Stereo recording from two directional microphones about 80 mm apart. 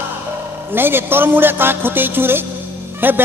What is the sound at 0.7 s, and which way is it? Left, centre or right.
Speech, right.